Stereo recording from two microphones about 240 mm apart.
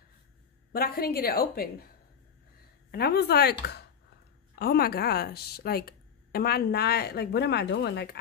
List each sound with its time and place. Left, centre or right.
0.7 s speech: left
2.9 s speech: left